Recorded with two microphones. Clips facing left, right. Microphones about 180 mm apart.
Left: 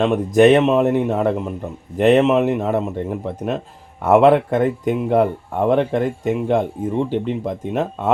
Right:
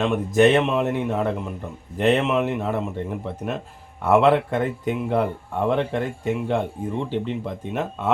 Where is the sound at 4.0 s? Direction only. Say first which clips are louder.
Left 4 dB; 45° left (ahead or behind).